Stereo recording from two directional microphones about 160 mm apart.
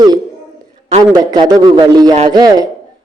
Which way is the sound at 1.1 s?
25° right (ahead or behind).